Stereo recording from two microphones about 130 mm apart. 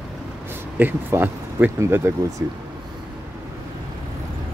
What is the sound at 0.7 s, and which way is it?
A man's voice, 15° right (ahead or behind).